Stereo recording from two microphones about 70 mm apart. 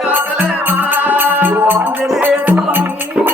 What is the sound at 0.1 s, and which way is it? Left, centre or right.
Music, right.